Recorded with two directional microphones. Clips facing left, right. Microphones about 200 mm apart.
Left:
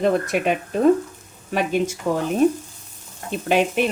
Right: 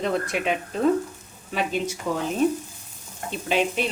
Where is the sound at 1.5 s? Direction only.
50° left (ahead or behind).